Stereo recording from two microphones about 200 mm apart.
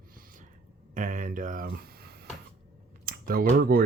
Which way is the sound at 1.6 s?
50° right (ahead or behind).